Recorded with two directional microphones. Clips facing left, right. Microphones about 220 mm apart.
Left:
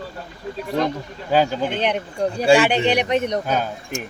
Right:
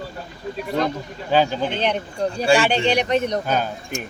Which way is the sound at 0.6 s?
Centre (ahead or behind).